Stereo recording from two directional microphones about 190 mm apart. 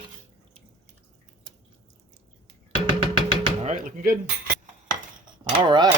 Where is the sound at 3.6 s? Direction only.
40° right (ahead or behind).